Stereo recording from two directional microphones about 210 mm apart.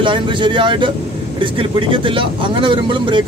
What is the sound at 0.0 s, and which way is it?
Speech, 25° right (ahead or behind).